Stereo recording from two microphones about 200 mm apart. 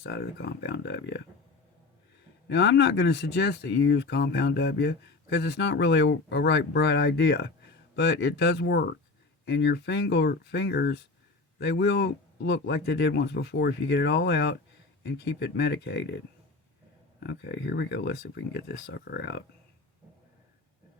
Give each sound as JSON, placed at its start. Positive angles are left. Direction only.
{"t": 0.0, "sound": "speech", "side_deg": 55}
{"t": 2.5, "sound": "speech", "side_deg": 60}